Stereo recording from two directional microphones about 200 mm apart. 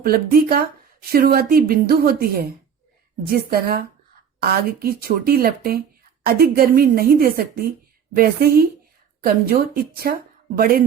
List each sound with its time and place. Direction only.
0.0 s a woman's voice: 50° right (ahead or behind)